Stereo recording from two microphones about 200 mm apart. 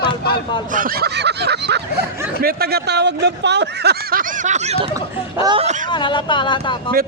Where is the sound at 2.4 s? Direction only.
50° right (ahead or behind); by 4.9 s 30° right (ahead or behind).